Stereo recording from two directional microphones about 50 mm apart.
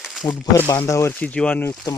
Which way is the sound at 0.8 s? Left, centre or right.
Left.